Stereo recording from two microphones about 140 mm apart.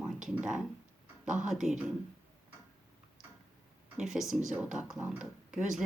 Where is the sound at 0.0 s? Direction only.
5° right (ahead or behind).